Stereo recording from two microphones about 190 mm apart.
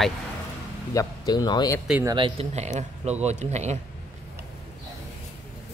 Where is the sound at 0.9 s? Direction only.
20° left (ahead or behind).